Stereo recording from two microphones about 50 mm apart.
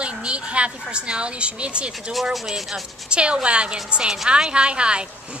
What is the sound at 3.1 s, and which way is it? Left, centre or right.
A woman's voice, right.